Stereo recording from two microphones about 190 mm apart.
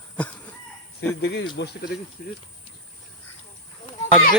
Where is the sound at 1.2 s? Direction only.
65° left (ahead or behind).